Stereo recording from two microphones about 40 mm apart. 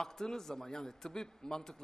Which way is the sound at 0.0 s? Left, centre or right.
Centre.